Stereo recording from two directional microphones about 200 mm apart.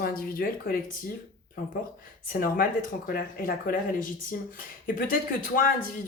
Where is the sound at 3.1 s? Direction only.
45° left (ahead or behind).